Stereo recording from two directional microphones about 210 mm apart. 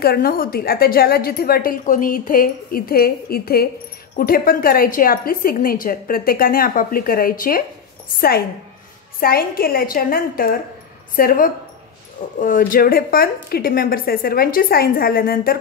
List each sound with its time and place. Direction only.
0.0 s a woman's voice: 45° left (ahead or behind)